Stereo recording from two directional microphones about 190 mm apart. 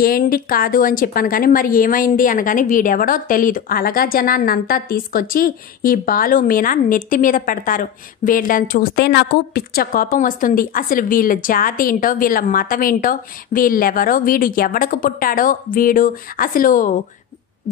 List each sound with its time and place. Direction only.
0.0 s a woman's voice: 50° left (ahead or behind)